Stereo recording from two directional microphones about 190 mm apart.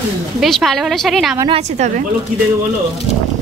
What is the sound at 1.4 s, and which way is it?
Speech, 30° right (ahead or behind).